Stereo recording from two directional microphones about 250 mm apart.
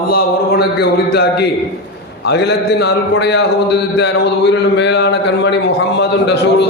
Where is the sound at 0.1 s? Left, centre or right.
Left.